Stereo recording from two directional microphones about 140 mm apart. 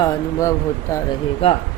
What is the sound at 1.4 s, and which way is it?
Speech, 40° left (ahead or behind).